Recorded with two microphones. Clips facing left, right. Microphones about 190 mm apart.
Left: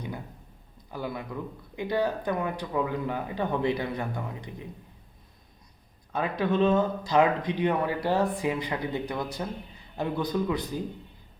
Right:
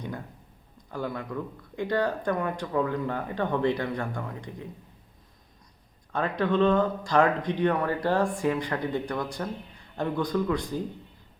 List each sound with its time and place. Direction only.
0.9 s speech: 10° left (ahead or behind)
6.1 s speech: 10° left (ahead or behind)